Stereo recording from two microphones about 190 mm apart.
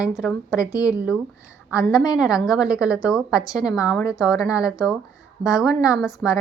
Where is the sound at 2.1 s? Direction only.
5° right (ahead or behind).